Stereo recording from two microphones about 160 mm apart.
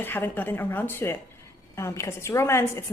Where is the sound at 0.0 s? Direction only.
15° left (ahead or behind).